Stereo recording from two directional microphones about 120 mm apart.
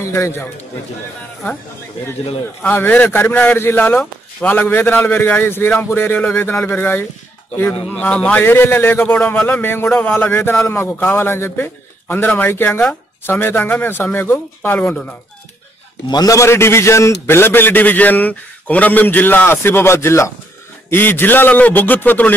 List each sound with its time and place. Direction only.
0.0 s a man's voice: 20° left (ahead or behind)
2.6 s a man's voice: 15° left (ahead or behind)
16.1 s a man's voice: 30° left (ahead or behind); by 22.3 s 15° left (ahead or behind)